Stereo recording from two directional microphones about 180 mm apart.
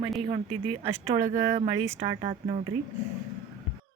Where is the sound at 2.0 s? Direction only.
30° right (ahead or behind).